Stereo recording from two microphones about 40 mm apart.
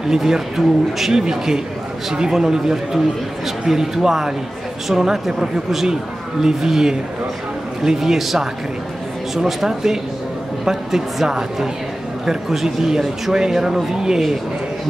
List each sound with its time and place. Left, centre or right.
0.1 s a man's voice: centre